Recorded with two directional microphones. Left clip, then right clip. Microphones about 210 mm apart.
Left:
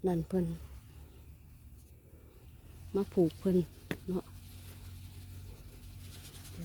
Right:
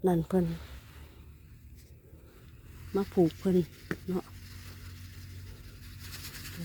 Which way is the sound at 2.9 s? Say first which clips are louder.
Right 3 dB; 5° left (ahead or behind).